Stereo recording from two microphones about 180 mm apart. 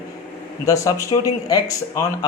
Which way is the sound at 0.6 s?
20° left (ahead or behind).